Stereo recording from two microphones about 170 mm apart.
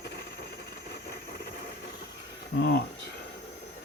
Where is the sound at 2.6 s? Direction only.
65° left (ahead or behind).